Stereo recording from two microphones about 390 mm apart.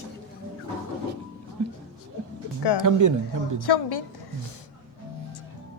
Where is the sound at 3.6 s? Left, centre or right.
Left.